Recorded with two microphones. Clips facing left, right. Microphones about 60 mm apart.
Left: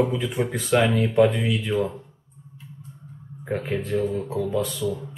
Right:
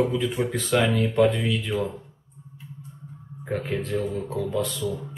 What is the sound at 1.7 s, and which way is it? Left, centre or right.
Speech, centre.